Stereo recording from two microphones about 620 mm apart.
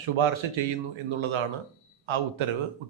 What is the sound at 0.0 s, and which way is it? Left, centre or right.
Speech, right.